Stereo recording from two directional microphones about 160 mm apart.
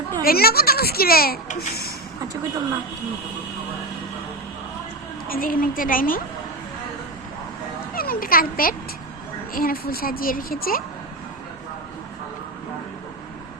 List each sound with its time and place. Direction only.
0.2 s a child's voice: 70° left (ahead or behind)
5.3 s a woman's voice: 65° left (ahead or behind)
7.9 s a woman's voice: 65° left (ahead or behind)